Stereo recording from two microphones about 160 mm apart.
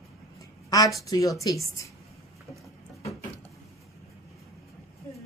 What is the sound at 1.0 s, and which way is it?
Speech, 20° left (ahead or behind).